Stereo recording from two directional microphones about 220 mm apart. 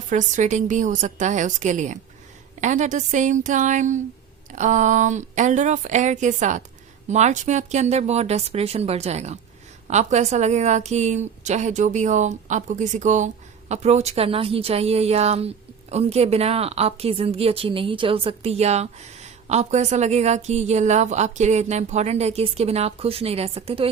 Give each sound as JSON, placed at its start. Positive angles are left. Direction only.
{"t": 0.1, "sound": "a woman's voice", "side_deg": -35}